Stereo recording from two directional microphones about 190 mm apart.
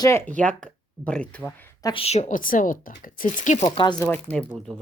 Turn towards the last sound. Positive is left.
turn(degrees=5)  # may be behind; listen again after turning